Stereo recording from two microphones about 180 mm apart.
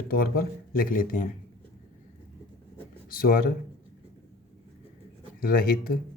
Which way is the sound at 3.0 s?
55° left (ahead or behind).